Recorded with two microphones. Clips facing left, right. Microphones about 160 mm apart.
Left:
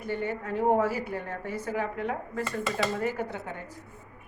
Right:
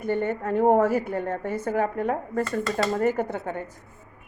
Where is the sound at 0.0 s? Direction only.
50° right (ahead or behind).